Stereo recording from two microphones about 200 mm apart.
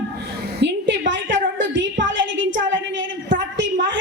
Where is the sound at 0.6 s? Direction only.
65° right (ahead or behind).